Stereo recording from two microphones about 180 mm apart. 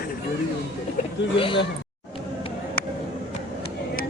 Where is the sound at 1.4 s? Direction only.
30° left (ahead or behind).